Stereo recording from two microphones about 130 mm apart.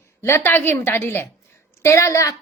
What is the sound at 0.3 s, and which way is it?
A woman's voice, 15° left (ahead or behind).